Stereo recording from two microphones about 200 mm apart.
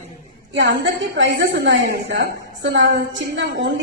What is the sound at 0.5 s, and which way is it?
A woman's voice, 60° right (ahead or behind).